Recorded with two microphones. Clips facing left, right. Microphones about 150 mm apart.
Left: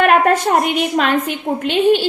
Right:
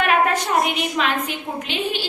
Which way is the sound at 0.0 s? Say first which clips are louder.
Left 6 dB; 45° left (ahead or behind).